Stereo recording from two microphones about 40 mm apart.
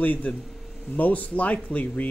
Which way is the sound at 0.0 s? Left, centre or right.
Left.